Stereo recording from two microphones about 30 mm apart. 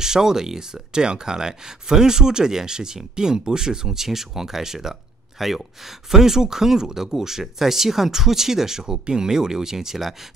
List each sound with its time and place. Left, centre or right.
0.0 s speech: centre
6.1 s speech: centre